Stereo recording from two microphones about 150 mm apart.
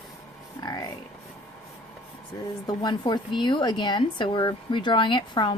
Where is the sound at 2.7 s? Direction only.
30° left (ahead or behind).